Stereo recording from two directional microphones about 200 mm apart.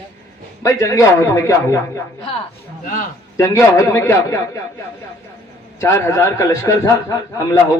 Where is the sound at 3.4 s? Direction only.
15° left (ahead or behind).